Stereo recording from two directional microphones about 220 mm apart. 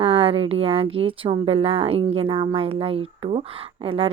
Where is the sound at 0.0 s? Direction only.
25° right (ahead or behind).